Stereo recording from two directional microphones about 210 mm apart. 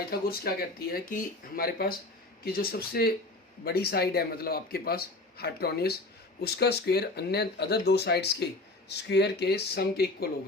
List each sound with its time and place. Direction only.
0.1 s a man's voice: 45° left (ahead or behind)